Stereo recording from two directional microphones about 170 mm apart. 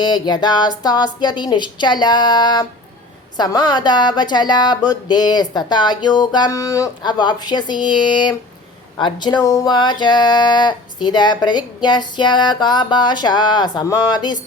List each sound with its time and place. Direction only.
0.0 s speech: 25° left (ahead or behind)